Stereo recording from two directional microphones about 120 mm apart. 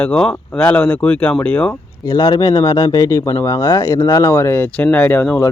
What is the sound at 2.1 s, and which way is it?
Speech, 30° left (ahead or behind).